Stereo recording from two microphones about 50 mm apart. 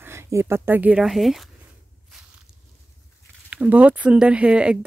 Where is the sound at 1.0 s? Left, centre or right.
Centre.